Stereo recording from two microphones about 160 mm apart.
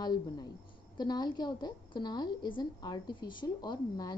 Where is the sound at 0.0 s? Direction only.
25° left (ahead or behind).